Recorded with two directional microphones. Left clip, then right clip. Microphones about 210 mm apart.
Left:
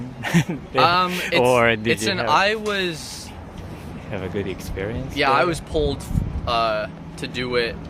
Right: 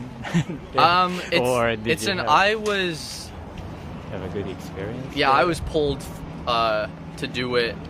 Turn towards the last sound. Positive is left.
turn(degrees=-10)  # may be behind; listen again after turning